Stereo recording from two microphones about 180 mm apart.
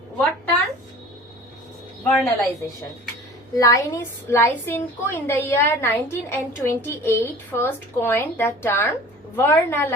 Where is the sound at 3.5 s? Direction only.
20° left (ahead or behind).